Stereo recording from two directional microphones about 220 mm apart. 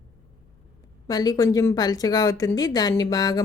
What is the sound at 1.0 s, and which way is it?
Speech, 15° left (ahead or behind).